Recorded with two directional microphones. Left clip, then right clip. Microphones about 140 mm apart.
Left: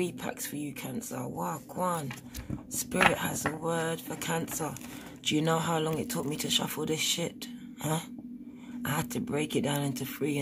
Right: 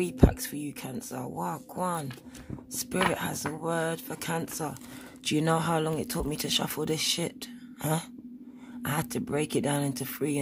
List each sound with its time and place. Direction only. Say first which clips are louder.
0.0 s speech: right 7 dB; 35° right (ahead or behind)
8.8 s speech: right 1 dB; 35° right (ahead or behind)